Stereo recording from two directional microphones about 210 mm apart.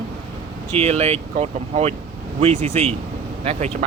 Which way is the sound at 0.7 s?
30° right (ahead or behind).